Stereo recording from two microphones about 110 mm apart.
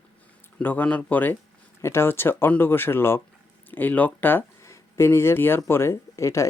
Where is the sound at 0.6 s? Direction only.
15° left (ahead or behind).